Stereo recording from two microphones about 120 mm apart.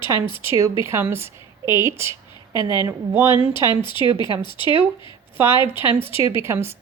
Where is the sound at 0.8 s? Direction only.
20° right (ahead or behind).